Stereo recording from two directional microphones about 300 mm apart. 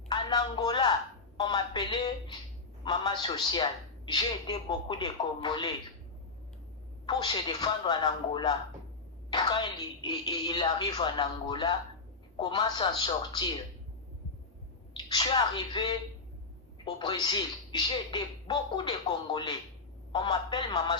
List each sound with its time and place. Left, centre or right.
0.1 s a woman's voice: centre
7.0 s a woman's voice: centre
14.9 s a woman's voice: centre